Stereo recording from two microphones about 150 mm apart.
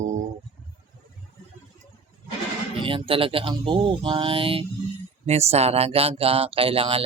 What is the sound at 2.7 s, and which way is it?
Speech, 35° right (ahead or behind).